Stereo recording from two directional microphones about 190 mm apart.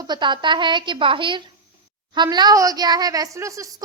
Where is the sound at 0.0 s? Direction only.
25° right (ahead or behind).